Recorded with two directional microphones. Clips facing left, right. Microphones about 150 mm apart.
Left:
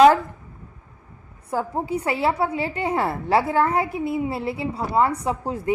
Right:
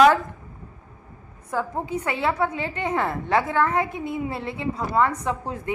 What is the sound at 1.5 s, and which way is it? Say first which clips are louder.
A woman's voice: left 2 dB; 30° left (ahead or behind).